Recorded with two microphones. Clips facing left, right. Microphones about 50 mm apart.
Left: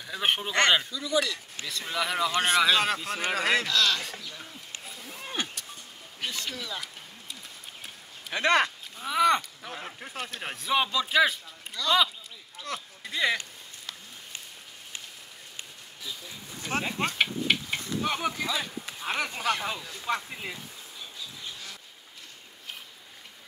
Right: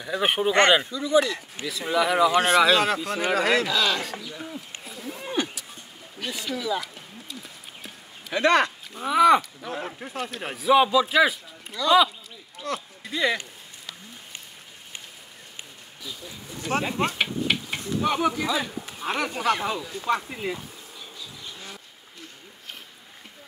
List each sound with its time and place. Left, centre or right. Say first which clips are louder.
0.0 s speech: right 5 dB; centre
0.8 s speech: right 6 dB; right
1.7 s speech: right 7 dB; centre
3.6 s speech: right 2 dB; centre
4.8 s a sound: right 6 dB; centre
6.3 s speech: right 7 dB; centre
12.5 s a sound: right 5 dB; centre
16.6 s speech: right 4 dB; centre
16.9 s speech: right 4 dB; right
17.2 s a sound: right 1 dB; centre
19.1 s speech: right 4 dB; centre